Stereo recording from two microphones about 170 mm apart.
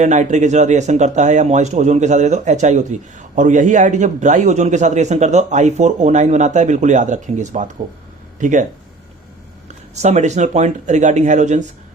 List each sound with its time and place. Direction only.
0.0 s a man's voice: 45° right (ahead or behind)
9.6 s a man's voice: 40° right (ahead or behind)